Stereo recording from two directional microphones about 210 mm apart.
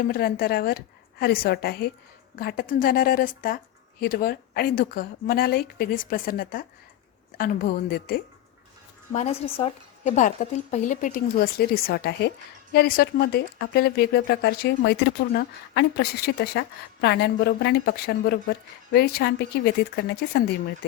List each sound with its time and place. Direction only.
0.0 s speech: 45° left (ahead or behind)
9.1 s a woman's voice: 35° left (ahead or behind); by 20.5 s 50° left (ahead or behind)